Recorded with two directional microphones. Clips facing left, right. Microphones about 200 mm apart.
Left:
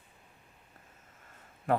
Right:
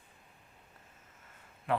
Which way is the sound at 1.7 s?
45° left (ahead or behind).